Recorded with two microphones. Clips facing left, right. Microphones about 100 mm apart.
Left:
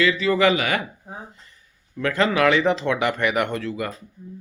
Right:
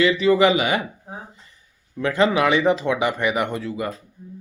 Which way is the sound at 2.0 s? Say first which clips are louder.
Right 1 dB; 20° right (ahead or behind).